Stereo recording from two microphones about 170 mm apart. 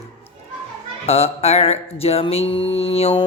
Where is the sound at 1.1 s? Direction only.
35° left (ahead or behind).